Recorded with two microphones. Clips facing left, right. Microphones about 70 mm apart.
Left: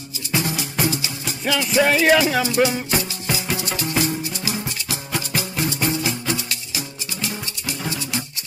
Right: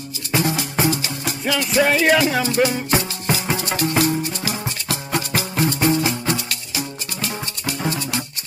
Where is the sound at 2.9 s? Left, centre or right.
Right.